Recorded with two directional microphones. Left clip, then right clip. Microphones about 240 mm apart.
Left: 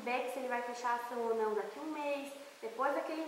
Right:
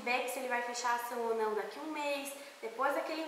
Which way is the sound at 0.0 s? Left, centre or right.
Centre.